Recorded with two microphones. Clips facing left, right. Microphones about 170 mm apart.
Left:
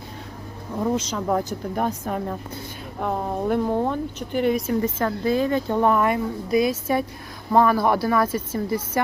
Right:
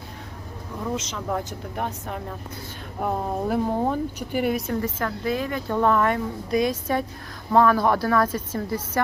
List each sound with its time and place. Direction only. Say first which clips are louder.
0.9 s a woman's voice: left 5 dB; 35° left (ahead or behind)
3.0 s speech: left 1 dB; 5° right (ahead or behind)
4.7 s a woman's voice: left 4 dB; 25° left (ahead or behind)